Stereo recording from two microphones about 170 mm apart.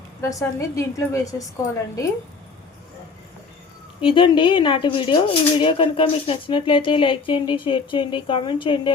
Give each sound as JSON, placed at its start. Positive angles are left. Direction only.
{"t": 0.2, "sound": "a woman's voice", "side_deg": 20}
{"t": 4.0, "sound": "speech", "side_deg": 30}